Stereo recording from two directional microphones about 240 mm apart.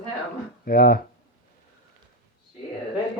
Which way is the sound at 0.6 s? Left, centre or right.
Left.